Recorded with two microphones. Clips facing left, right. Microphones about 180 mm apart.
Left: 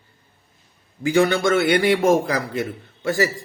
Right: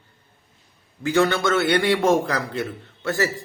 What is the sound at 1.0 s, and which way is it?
A man's voice, 15° left (ahead or behind).